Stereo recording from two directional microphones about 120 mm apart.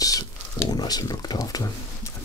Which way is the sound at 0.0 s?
30° left (ahead or behind).